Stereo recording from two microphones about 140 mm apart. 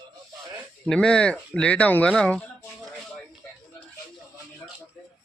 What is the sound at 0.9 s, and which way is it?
A man's voice, 5° left (ahead or behind).